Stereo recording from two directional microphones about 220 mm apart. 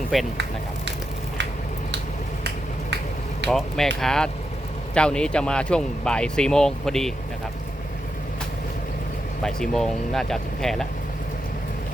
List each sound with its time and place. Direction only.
0.1 s speech: centre (ahead or behind)
3.4 s speech: centre (ahead or behind)
9.4 s speech: 5° left (ahead or behind)